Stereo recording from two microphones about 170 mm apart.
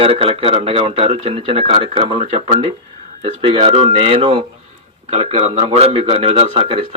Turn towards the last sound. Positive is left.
turn(degrees=-35)  # may be behind; listen again after turning